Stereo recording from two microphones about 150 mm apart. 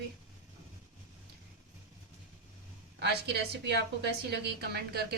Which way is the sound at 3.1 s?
90° right.